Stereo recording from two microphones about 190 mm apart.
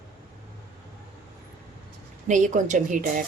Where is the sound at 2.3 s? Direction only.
40° right (ahead or behind).